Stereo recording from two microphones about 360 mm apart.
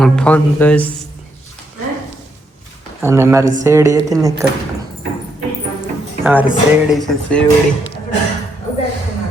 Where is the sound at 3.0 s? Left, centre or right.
Centre.